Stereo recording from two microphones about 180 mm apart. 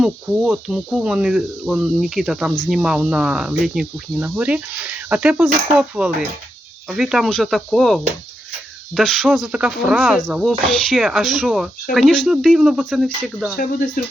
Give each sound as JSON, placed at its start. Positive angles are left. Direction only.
{"t": 0.0, "sound": "speech", "side_deg": -5}
{"t": 13.6, "sound": "speech", "side_deg": 55}